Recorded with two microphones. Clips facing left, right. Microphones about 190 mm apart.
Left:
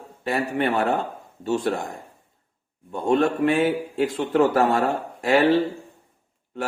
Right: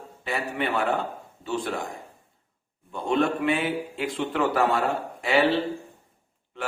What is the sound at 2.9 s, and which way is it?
Speech, 50° left (ahead or behind).